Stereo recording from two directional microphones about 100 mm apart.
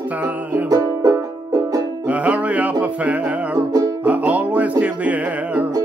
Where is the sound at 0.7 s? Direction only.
35° right (ahead or behind).